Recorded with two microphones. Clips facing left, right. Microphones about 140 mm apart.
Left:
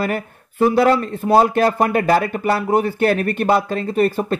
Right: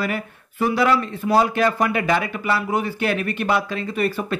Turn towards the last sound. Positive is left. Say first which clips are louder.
# left 5 dB
turn(degrees=45)  # may be behind; listen again after turning